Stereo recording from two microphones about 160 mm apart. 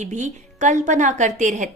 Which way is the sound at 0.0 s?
50° right (ahead or behind).